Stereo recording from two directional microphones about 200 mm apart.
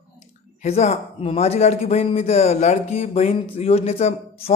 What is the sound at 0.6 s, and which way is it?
A man's voice, 35° left (ahead or behind).